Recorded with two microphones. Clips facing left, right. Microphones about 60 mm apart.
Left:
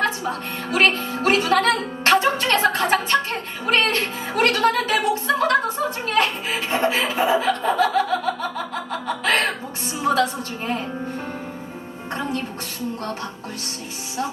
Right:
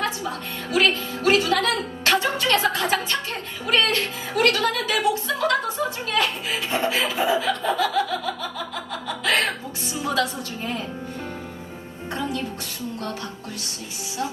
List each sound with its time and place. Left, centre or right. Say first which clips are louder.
0.0 s music: left 4 dB; left